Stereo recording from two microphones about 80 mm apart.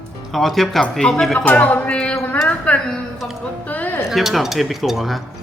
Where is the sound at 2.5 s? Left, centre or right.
Centre.